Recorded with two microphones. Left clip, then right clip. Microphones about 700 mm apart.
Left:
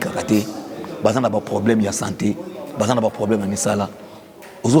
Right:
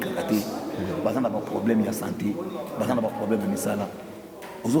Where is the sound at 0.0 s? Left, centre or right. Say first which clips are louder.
Left 5 dB; left.